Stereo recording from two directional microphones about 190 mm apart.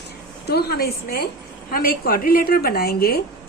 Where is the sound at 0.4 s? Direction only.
55° left (ahead or behind).